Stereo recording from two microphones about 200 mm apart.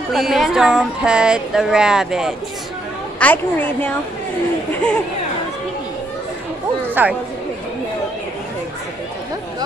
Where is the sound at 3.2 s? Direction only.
10° left (ahead or behind).